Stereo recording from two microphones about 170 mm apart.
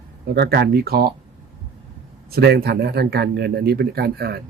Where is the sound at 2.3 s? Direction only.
70° right (ahead or behind).